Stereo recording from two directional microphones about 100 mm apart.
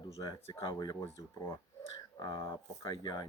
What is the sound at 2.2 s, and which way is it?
Speech, 40° left (ahead or behind).